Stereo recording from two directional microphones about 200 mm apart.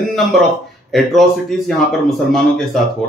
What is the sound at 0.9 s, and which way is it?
Speech, centre (ahead or behind).